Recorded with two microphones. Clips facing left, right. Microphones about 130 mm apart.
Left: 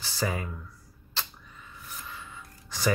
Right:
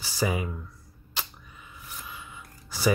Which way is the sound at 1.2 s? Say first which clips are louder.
Even; 15° right (ahead or behind).